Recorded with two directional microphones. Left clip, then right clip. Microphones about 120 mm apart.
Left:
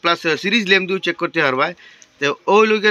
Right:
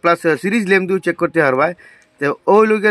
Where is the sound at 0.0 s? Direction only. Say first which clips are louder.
Right 3 dB; 55° right (ahead or behind); by 1.6 s 70° right (ahead or behind).